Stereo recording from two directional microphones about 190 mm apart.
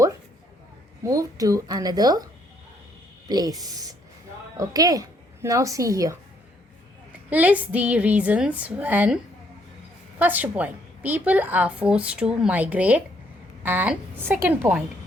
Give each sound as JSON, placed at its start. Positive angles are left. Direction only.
{"t": 1.0, "sound": "a woman's voice", "side_deg": -15}
{"t": 3.2, "sound": "a woman's voice", "side_deg": -20}
{"t": 10.2, "sound": "a woman's voice", "side_deg": -10}